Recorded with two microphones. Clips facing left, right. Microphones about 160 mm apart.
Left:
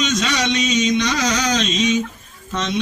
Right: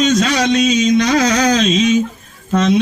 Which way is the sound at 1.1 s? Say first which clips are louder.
Right 7 dB; 60° right (ahead or behind).